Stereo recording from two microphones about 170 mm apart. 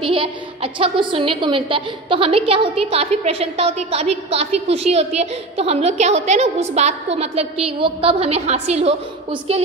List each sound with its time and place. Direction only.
0.0 s a woman's voice: 30° right (ahead or behind)